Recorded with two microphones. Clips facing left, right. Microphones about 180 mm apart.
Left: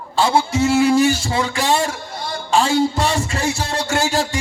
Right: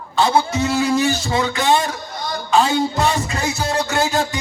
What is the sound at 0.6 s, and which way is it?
Music, 30° left (ahead or behind).